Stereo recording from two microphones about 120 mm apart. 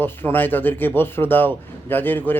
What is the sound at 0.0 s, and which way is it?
Speech, 15° left (ahead or behind).